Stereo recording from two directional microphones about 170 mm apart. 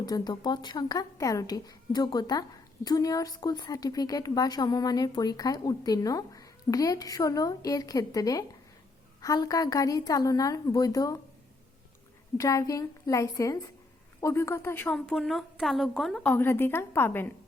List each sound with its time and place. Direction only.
0.0 s speech: 25° left (ahead or behind)
12.4 s a woman's voice: 20° left (ahead or behind)